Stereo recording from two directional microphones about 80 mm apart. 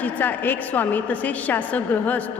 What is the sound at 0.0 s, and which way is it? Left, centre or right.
A woman's voice, left.